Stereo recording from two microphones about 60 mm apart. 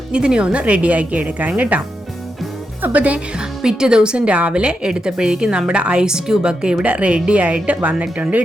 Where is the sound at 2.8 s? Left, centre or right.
Right.